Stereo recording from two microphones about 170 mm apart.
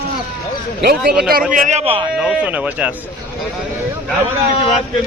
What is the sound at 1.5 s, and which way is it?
Speech, 50° right (ahead or behind).